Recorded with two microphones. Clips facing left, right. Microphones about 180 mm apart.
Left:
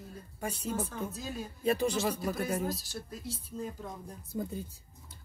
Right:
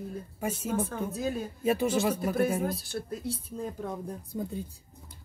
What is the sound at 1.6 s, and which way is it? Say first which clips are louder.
Speech: right 2 dB; 5° right (ahead or behind).